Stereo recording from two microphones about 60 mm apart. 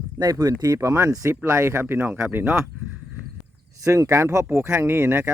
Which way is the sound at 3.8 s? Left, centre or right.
Right.